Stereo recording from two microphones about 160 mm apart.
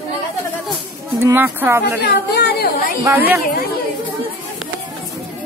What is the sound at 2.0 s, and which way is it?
Speech, 85° left.